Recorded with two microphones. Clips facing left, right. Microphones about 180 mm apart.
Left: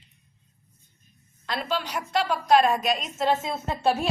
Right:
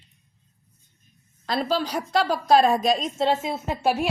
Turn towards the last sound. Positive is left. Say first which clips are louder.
# right 1 dB
turn(degrees=-10)  # may be behind; listen again after turning